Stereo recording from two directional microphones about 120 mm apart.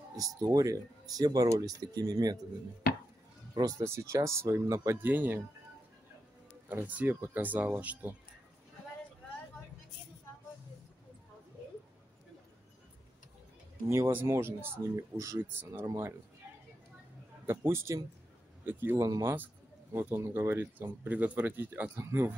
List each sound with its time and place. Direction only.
0.1 s speech: 30° right (ahead or behind)
3.5 s speech: 30° right (ahead or behind)
6.7 s speech: 15° right (ahead or behind)
13.8 s speech: 25° right (ahead or behind)
17.5 s speech: 20° right (ahead or behind)